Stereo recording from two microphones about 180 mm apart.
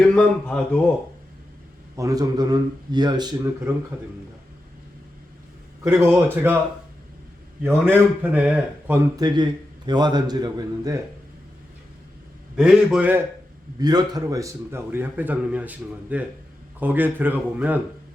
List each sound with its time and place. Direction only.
0.0 s a man's voice: 5° left (ahead or behind)
2.0 s a man's voice: 20° right (ahead or behind)
5.8 s a man's voice: 15° right (ahead or behind)
7.6 s a man's voice: 10° right (ahead or behind)
9.1 s a man's voice: 25° right (ahead or behind)
12.5 s a man's voice: 5° right (ahead or behind)
13.7 s a man's voice: 20° right (ahead or behind)